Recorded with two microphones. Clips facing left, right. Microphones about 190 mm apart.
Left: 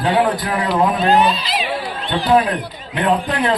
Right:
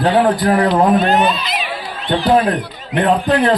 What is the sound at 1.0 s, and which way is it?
Speech, 30° left (ahead or behind).